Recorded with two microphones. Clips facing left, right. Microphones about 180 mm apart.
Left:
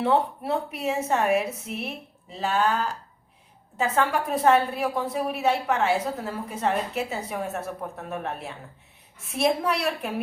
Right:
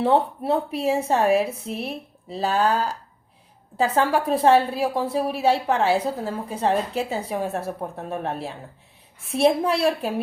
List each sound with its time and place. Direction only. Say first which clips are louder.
0.0 s a woman's voice: right 3 dB; 30° right (ahead or behind)